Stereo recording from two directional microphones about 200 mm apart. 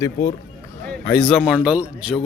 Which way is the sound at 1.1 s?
5° left (ahead or behind).